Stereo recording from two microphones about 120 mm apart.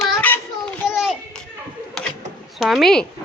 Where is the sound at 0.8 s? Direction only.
5° right (ahead or behind).